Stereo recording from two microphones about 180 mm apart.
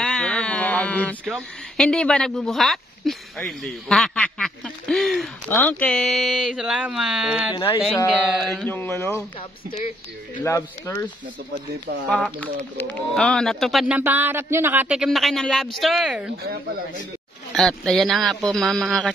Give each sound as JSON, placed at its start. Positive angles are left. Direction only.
{"t": 0.0, "sound": "a sound", "side_deg": 5}
{"t": 1.2, "sound": "speech", "side_deg": 0}
{"t": 7.5, "sound": "speech", "side_deg": 25}
{"t": 8.1, "sound": "speech", "side_deg": 0}
{"t": 9.8, "sound": "speech", "side_deg": 45}
{"t": 10.4, "sound": "speech", "side_deg": 15}
{"t": 12.1, "sound": "speech", "side_deg": 5}
{"t": 17.5, "sound": "speech", "side_deg": 0}